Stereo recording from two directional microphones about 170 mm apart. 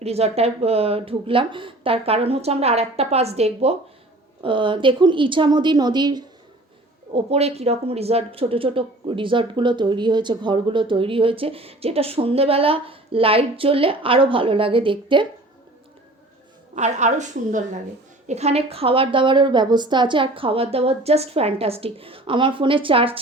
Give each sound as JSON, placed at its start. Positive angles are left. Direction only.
{"t": 0.0, "sound": "a woman's voice", "side_deg": -35}
{"t": 7.1, "sound": "a woman's voice", "side_deg": -35}
{"t": 16.7, "sound": "a woman's voice", "side_deg": -45}